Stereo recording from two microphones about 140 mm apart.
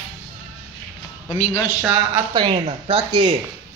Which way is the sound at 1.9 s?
30° right (ahead or behind).